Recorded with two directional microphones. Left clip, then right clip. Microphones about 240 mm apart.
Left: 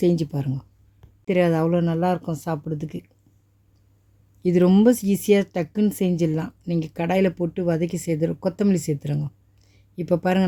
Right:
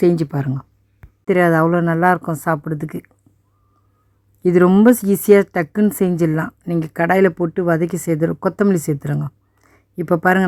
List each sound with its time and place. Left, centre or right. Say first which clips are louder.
0.0 s speech: right 6 dB; centre
4.4 s speech: right 6 dB; centre